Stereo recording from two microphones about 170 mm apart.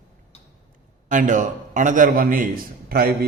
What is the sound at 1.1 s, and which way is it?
A man's voice, 50° right (ahead or behind).